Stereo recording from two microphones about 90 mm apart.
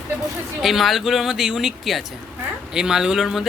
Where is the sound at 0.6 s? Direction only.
Centre (ahead or behind).